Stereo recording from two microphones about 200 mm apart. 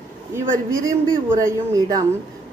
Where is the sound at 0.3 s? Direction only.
15° right (ahead or behind).